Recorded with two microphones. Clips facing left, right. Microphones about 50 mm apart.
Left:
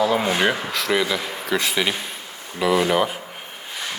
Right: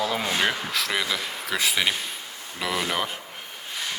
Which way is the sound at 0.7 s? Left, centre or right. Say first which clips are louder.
Left 5 dB; centre.